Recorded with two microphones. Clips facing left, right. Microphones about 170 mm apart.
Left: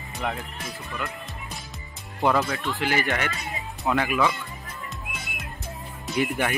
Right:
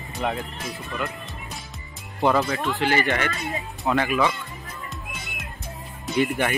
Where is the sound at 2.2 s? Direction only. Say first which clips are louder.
Right 2 dB; centre (ahead or behind).